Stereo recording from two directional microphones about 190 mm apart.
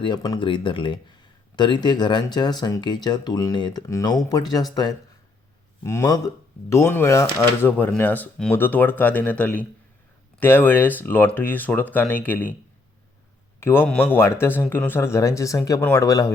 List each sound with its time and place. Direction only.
0.0 s speech: 25° left (ahead or behind)
13.6 s speech: 10° left (ahead or behind)